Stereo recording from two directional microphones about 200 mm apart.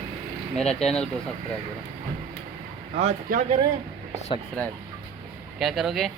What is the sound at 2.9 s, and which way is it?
Speech, 35° right (ahead or behind).